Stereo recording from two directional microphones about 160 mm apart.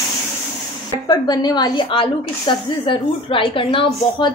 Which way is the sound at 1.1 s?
25° left (ahead or behind).